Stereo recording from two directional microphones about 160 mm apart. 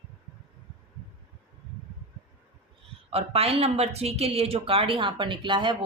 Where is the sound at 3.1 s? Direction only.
40° right (ahead or behind).